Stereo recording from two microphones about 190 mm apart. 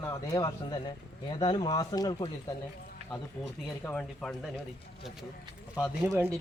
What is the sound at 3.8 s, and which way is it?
Speech, 5° left (ahead or behind).